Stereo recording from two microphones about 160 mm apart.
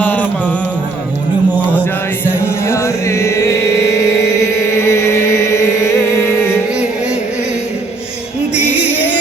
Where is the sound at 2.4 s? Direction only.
15° left (ahead or behind).